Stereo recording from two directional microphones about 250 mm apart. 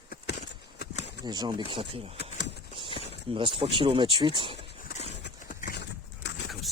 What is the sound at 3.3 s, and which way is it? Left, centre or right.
Speech, right.